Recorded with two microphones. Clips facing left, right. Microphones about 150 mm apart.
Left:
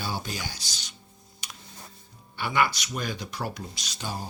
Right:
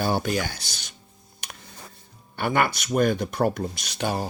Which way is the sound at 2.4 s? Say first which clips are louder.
Right 3 dB; 50° right (ahead or behind).